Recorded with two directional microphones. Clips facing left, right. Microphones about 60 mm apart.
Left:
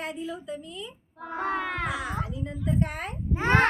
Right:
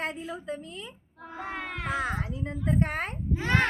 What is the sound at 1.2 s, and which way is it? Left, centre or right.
Crowd, left.